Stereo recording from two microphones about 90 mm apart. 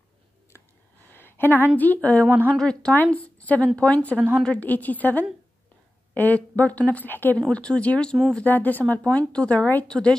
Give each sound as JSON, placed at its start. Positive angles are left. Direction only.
{"t": 1.1, "sound": "a sound", "side_deg": 25}
{"t": 1.8, "sound": "speech", "side_deg": 20}
{"t": 2.2, "sound": "speech", "side_deg": -20}
{"t": 2.5, "sound": "speech", "side_deg": 10}
{"t": 2.9, "sound": "a woman's voice", "side_deg": 20}
{"t": 7.4, "sound": "a woman's voice", "side_deg": 10}